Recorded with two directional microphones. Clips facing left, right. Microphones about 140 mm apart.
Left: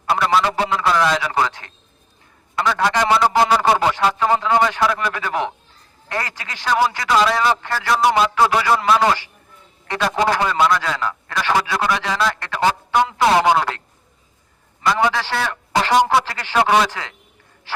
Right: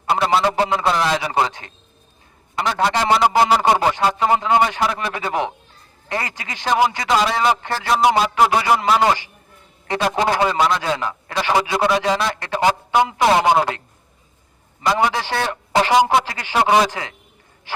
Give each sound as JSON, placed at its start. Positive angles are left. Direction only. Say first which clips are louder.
{"t": 0.0, "sound": "a man's voice", "louder": "even", "side_deg": -25}